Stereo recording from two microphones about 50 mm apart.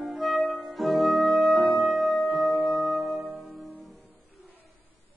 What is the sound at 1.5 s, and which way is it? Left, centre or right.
Music, left.